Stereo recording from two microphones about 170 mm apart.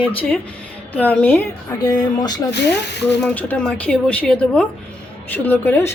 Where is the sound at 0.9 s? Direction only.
10° left (ahead or behind).